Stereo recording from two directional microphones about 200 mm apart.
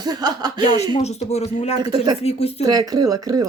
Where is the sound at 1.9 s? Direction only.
20° right (ahead or behind).